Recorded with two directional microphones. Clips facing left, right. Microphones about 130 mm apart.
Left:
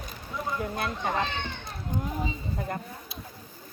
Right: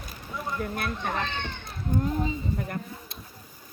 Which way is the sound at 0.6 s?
20° left (ahead or behind).